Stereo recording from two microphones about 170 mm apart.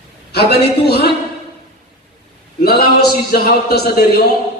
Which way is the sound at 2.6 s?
65° left (ahead or behind).